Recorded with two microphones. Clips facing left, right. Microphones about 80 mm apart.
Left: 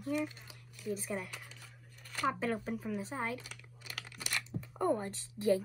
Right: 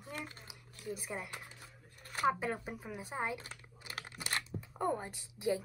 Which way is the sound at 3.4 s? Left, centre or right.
Right.